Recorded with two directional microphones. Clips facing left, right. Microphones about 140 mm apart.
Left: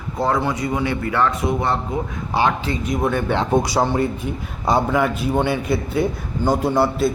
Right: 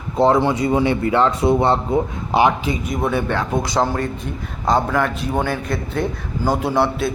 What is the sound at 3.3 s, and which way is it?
Speech, 20° left (ahead or behind).